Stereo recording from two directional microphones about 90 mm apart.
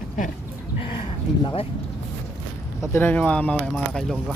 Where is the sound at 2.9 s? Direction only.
25° left (ahead or behind).